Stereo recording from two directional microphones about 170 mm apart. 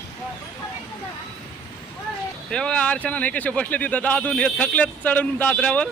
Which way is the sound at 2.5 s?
5° left (ahead or behind).